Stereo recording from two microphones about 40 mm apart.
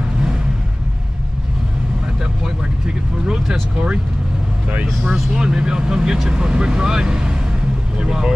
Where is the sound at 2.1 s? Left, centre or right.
Centre.